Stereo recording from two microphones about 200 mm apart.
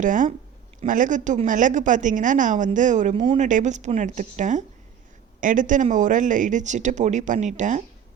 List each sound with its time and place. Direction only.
0.0 s a woman's voice: 40° right (ahead or behind)